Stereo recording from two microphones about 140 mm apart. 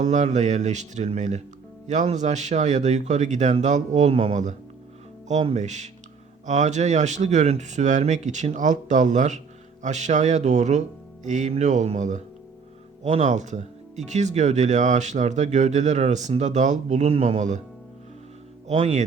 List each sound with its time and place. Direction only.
0.0 s speech: 60° right (ahead or behind)
5.5 s speech: 60° right (ahead or behind)
18.7 s speech: 55° right (ahead or behind)